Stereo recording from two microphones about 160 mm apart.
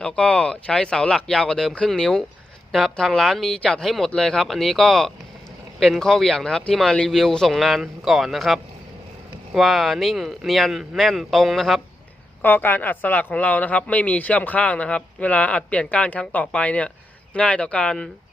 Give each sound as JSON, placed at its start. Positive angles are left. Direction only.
{"t": 0.0, "sound": "speech", "side_deg": 5}